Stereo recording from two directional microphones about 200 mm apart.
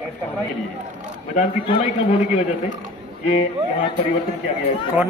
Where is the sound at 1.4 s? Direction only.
30° left (ahead or behind).